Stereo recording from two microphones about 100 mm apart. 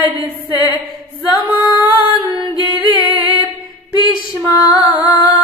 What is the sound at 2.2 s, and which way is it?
A capella, 55° right (ahead or behind).